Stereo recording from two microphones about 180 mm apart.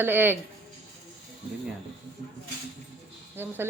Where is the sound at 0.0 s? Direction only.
10° right (ahead or behind).